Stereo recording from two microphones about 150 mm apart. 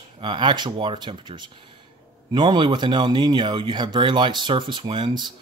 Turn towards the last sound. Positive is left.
turn(degrees=-30)  # may be behind; listen again after turning